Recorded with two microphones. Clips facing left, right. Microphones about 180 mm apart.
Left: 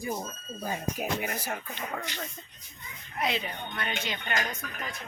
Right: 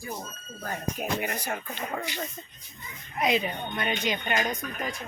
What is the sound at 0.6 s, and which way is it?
Speech, 10° left (ahead or behind).